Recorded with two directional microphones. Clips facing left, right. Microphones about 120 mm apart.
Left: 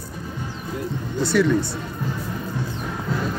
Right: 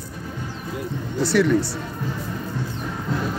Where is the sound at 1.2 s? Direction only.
80° right.